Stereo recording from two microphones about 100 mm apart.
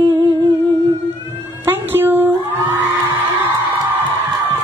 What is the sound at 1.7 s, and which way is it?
Cat, 20° right (ahead or behind).